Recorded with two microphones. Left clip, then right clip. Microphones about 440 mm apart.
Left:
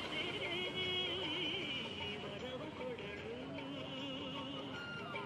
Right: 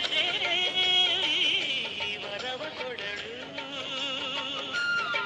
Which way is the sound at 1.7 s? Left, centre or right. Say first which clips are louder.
Right 12 dB; right.